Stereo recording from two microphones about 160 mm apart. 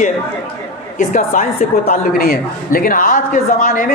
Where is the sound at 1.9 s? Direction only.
70° left (ahead or behind).